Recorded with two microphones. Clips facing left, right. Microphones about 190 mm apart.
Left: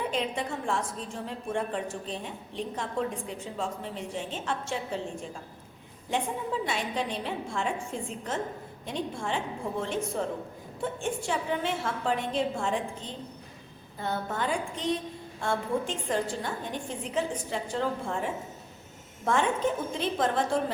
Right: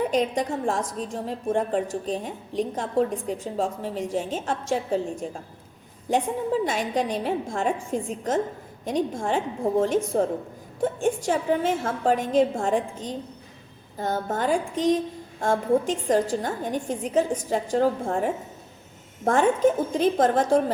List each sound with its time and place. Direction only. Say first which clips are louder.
0.1 s a woman's voice: right 7 dB; 40° right (ahead or behind)